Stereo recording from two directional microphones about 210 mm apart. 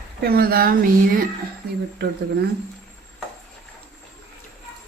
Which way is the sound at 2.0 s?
55° right (ahead or behind).